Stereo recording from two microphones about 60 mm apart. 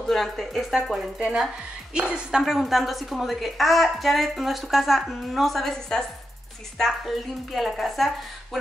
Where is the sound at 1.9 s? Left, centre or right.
Centre.